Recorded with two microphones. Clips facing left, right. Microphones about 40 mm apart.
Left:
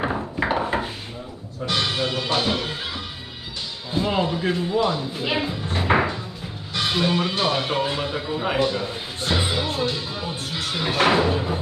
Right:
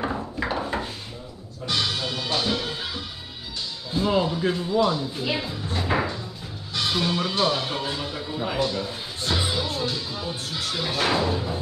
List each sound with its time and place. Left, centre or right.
0.0 s a sound: left
1.7 s music: centre
2.3 s speech: left
3.9 s speech: left